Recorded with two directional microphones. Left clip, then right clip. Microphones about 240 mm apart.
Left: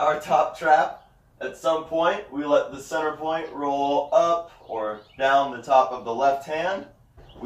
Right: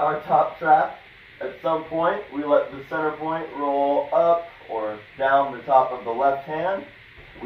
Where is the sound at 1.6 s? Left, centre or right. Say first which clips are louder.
Even; left.